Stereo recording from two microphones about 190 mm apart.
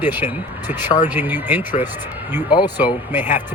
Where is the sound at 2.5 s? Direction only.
20° left (ahead or behind).